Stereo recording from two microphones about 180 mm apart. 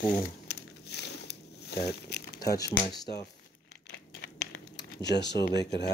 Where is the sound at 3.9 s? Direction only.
70° left (ahead or behind).